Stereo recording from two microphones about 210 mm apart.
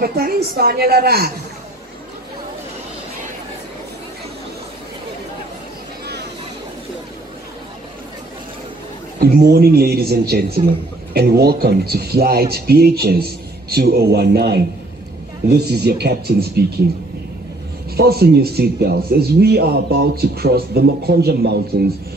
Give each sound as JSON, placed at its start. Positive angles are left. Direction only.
{"t": 0.0, "sound": "a man's voice", "side_deg": -45}
{"t": 9.2, "sound": "a man's voice", "side_deg": -45}
{"t": 17.9, "sound": "a man's voice", "side_deg": -50}